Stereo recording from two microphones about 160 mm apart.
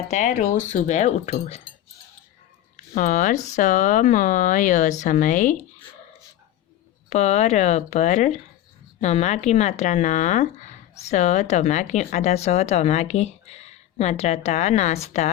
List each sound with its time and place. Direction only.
0.1 s a woman's voice: 50° left (ahead or behind)
2.9 s a woman's voice: 55° left (ahead or behind)
7.1 s a woman's voice: 45° left (ahead or behind)